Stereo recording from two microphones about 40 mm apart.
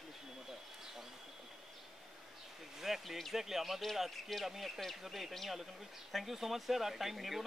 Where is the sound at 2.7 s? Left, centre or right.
Centre.